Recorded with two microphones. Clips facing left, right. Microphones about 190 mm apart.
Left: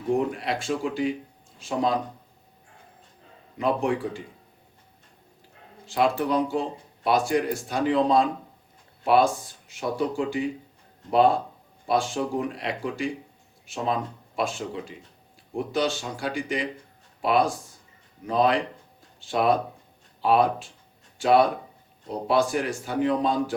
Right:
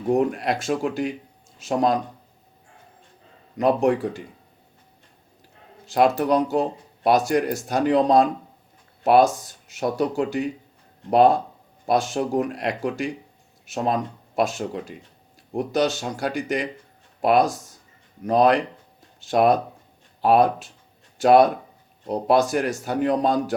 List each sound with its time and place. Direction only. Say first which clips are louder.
0.1 s speech: right 4 dB; 45° right (ahead or behind)
3.6 s a man's voice: right 5 dB; 40° right (ahead or behind)
5.8 s speech: right 4 dB; 40° right (ahead or behind)